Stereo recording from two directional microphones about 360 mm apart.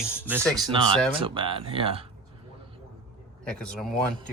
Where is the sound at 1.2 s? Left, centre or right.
Centre.